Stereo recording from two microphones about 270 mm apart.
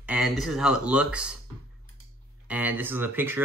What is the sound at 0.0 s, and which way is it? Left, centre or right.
Speech, centre.